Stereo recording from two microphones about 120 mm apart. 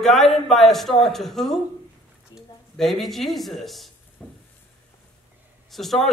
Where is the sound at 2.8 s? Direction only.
Centre (ahead or behind).